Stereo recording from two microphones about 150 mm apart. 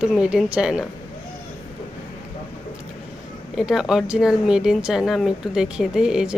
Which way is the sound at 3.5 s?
Centre (ahead or behind).